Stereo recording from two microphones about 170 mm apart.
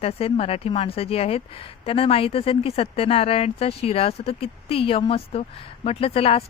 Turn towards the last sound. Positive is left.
turn(degrees=35)  # may be behind; listen again after turning